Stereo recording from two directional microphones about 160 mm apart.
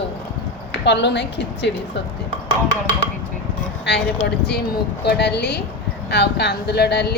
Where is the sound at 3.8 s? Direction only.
90° left.